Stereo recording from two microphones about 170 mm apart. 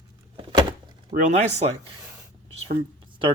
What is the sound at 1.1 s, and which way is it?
Speech, 40° right (ahead or behind).